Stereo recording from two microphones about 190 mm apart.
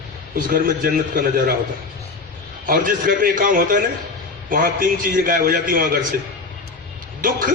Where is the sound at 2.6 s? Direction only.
45° right (ahead or behind).